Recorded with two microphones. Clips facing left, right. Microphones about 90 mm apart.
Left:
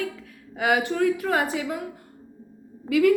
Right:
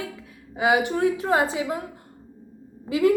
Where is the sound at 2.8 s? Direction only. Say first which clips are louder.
Left 1 dB; 25° right (ahead or behind).